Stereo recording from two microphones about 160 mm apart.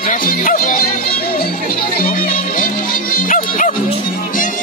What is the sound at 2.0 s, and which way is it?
Music, 60° left (ahead or behind).